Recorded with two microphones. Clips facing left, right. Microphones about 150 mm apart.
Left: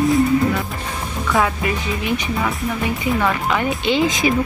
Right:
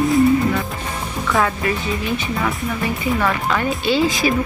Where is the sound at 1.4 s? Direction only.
15° left (ahead or behind).